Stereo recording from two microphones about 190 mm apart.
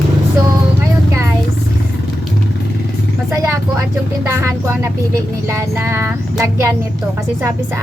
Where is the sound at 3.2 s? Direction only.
15° right (ahead or behind).